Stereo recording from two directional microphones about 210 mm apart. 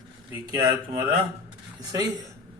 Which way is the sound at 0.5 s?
20° right (ahead or behind).